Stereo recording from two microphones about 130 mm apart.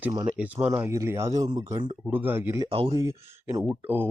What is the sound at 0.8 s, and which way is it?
Speech, 20° right (ahead or behind).